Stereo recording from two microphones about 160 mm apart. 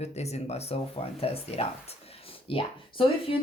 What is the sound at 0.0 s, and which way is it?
Speech, 45° left (ahead or behind).